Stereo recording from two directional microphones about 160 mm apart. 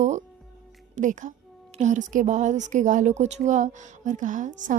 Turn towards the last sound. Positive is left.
turn(degrees=-50)  # may be behind; listen again after turning